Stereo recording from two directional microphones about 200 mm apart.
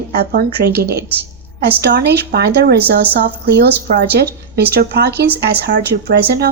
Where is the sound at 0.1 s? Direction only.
50° right (ahead or behind).